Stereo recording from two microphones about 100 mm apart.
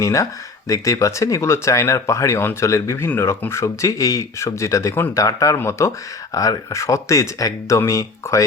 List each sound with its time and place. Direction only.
0.0 s speech: 30° left (ahead or behind)